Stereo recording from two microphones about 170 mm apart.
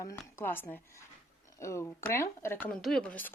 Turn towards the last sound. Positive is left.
turn(degrees=10)  # may be behind; listen again after turning